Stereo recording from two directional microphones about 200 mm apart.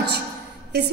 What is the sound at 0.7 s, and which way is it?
Music, 55° right (ahead or behind).